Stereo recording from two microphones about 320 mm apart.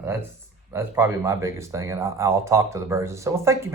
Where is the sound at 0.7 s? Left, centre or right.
Centre.